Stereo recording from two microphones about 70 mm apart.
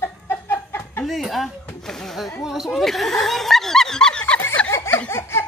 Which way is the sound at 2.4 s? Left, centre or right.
Centre.